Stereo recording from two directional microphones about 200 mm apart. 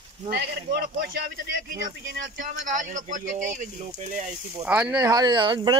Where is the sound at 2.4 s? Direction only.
40° right (ahead or behind).